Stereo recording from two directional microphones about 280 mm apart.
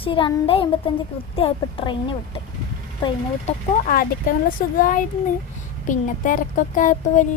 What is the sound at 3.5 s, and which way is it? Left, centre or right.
Speech, left.